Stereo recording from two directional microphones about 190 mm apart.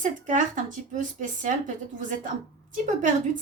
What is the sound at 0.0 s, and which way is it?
Speech, 40° right (ahead or behind).